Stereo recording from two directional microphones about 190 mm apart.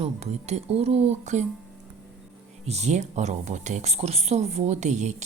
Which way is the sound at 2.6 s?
35° right (ahead or behind).